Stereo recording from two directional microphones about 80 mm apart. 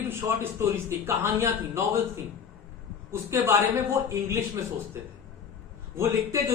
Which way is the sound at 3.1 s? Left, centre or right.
Right.